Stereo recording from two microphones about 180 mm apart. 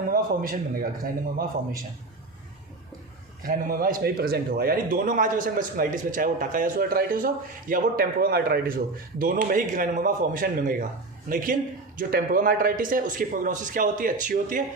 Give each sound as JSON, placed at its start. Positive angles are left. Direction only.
{"t": 0.1, "sound": "speech", "side_deg": -55}
{"t": 3.4, "sound": "speech", "side_deg": -50}